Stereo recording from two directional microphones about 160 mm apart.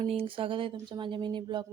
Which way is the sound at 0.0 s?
35° right (ahead or behind).